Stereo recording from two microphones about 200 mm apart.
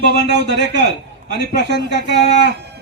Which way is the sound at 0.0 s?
60° right (ahead or behind).